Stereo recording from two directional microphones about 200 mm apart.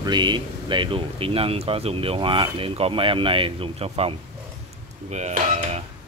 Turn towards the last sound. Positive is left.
turn(degrees=-35)  # may be behind; listen again after turning